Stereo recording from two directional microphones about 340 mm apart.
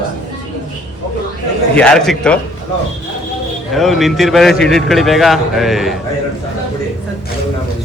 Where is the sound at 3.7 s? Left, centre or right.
Centre.